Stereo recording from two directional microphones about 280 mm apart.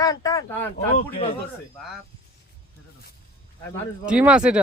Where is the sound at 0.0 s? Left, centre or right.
Centre.